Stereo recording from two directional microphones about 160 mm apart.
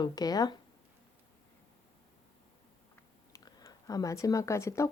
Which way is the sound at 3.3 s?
25° left (ahead or behind).